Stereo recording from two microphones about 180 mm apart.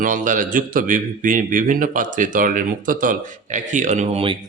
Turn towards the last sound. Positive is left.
turn(degrees=-30)  # may be behind; listen again after turning